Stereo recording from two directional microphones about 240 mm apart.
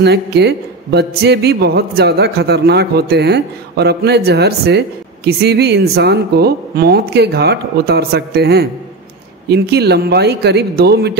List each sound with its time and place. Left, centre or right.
0.0 s speech: right